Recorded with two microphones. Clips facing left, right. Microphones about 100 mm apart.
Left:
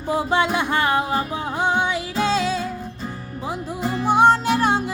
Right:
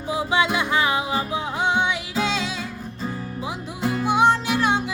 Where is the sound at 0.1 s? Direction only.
50° left (ahead or behind).